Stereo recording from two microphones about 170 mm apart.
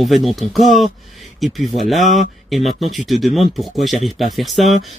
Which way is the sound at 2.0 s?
45° left (ahead or behind).